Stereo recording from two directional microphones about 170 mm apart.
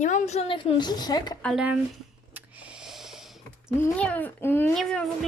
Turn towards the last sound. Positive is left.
turn(degrees=5)  # may be behind; listen again after turning